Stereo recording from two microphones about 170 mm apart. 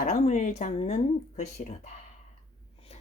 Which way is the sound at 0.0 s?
45° left (ahead or behind).